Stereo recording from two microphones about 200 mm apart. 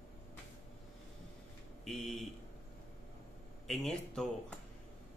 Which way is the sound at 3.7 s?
Centre (ahead or behind).